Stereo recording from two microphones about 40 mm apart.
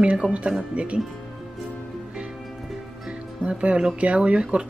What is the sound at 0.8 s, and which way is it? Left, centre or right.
Speech, right.